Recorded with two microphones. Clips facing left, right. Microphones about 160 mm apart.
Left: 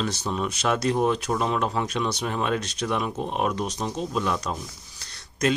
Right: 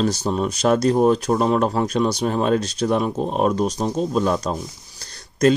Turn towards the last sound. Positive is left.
turn(degrees=-35)  # may be behind; listen again after turning